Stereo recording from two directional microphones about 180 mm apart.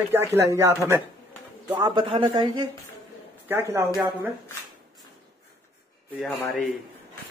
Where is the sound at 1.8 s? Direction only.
25° right (ahead or behind).